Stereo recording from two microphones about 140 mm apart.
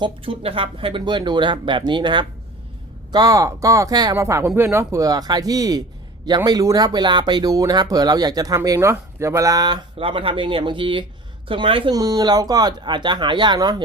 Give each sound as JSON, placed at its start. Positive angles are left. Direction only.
{"t": 0.0, "sound": "speech", "side_deg": -40}
{"t": 10.0, "sound": "speech", "side_deg": -40}